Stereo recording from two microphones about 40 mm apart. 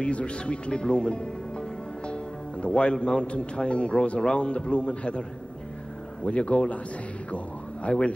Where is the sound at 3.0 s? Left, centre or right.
Left.